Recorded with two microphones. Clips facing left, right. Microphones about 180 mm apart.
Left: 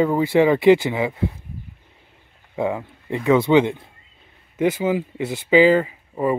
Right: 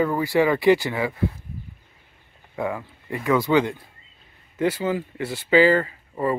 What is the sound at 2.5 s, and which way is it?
Speech, 20° left (ahead or behind).